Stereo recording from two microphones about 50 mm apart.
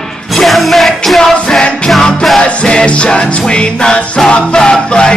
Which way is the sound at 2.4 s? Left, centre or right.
Centre.